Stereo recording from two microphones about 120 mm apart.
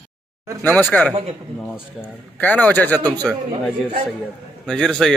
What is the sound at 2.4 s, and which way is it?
Speech, 15° left (ahead or behind).